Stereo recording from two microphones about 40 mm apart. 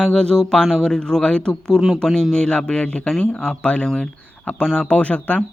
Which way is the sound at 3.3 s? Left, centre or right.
Left.